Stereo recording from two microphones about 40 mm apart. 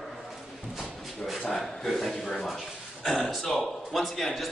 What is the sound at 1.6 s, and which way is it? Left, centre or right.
A man's voice, centre.